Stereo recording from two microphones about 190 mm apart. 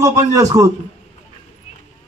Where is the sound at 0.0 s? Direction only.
20° right (ahead or behind).